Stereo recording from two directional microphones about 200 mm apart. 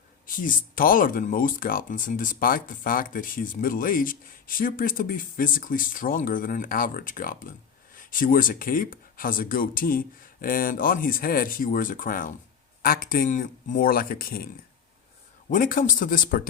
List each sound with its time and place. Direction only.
0.3 s speech: 45° left (ahead or behind)